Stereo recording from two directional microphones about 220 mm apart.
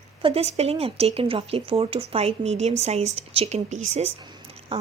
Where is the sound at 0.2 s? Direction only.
25° right (ahead or behind).